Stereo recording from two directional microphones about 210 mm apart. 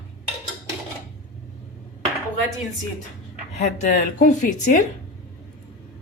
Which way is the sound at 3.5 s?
35° left (ahead or behind).